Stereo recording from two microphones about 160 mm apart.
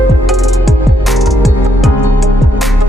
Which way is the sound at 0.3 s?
Centre (ahead or behind).